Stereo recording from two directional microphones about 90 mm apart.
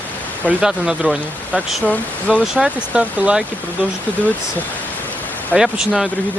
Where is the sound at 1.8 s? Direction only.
15° left (ahead or behind).